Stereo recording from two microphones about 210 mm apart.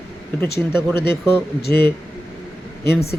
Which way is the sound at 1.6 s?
50° left (ahead or behind).